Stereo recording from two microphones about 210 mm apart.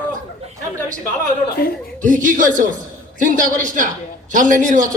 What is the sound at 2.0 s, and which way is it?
A man's voice, 40° right (ahead or behind).